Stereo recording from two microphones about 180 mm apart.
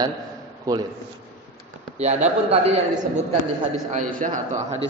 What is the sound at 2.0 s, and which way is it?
A man's voice, 35° right (ahead or behind).